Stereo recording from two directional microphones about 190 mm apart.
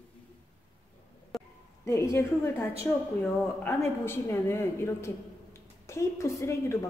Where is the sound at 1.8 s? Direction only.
15° left (ahead or behind).